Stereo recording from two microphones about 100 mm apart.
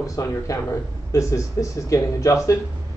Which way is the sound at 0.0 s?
35° left (ahead or behind).